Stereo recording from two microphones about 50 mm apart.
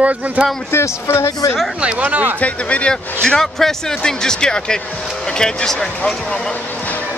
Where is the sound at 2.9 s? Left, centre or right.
Centre.